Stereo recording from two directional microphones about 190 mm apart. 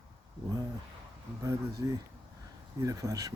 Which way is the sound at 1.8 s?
20° right (ahead or behind).